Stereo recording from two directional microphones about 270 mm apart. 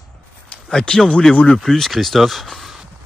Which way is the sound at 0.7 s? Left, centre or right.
Centre.